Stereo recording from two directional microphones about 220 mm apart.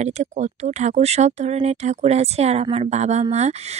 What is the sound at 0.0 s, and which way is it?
Speech, 30° right (ahead or behind).